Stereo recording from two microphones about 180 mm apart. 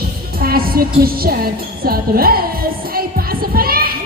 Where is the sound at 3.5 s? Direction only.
55° right (ahead or behind).